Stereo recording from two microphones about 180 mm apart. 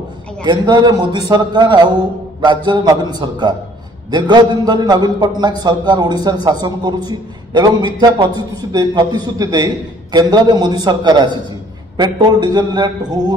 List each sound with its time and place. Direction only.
0.5 s a man's voice: 25° right (ahead or behind)